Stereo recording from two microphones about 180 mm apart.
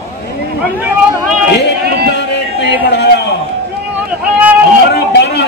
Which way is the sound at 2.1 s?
75° left (ahead or behind).